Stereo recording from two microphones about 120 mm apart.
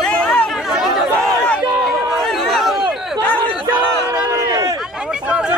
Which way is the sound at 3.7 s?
15° right (ahead or behind).